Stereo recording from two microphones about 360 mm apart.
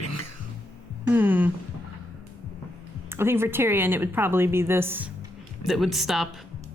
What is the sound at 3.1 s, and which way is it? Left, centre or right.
A woman's voice, centre.